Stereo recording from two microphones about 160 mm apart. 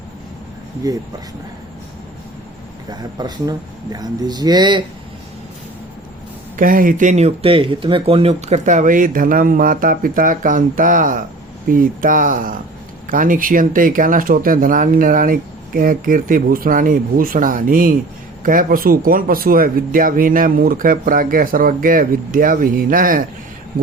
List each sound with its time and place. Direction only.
3.0 s speech: 25° right (ahead or behind)
6.6 s speech: 60° right (ahead or behind)